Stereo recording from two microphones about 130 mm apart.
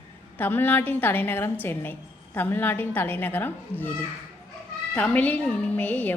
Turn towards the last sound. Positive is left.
turn(degrees=10)  # may be behind; listen again after turning